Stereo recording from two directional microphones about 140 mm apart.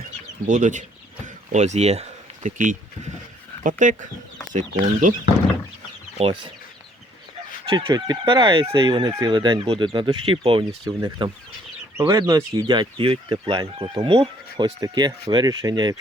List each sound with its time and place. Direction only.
0.4 s speech: 65° right (ahead or behind)
6.1 s speech: 35° right (ahead or behind)
7.6 s speech: 40° right (ahead or behind)